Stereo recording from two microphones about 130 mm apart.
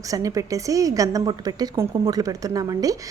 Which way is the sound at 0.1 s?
25° right (ahead or behind).